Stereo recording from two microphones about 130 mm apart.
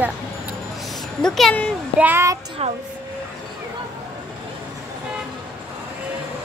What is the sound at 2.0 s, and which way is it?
Speech, 20° right (ahead or behind).